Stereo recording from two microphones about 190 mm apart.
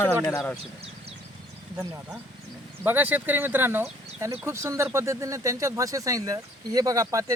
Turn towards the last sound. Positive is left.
turn(degrees=-20)  # may be behind; listen again after turning